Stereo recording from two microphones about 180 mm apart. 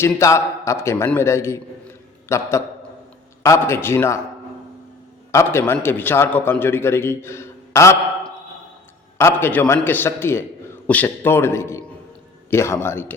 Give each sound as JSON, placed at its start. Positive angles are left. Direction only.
{"t": 0.0, "sound": "a man's voice", "side_deg": 15}
{"t": 5.3, "sound": "a man's voice", "side_deg": 15}
{"t": 9.1, "sound": "a man's voice", "side_deg": 15}